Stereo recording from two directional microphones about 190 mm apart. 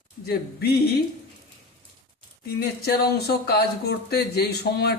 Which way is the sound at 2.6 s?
55° left (ahead or behind).